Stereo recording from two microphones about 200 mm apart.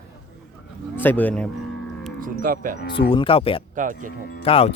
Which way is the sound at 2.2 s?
45° right (ahead or behind).